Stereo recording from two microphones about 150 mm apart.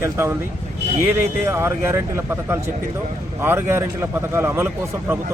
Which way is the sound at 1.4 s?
15° right (ahead or behind).